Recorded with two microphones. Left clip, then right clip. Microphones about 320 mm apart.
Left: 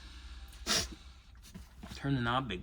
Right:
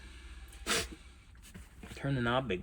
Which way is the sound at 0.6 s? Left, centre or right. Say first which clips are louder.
Left 1 dB; left.